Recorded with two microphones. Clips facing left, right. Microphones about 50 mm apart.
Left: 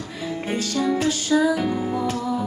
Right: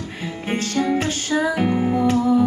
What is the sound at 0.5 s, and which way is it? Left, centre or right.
Music, right.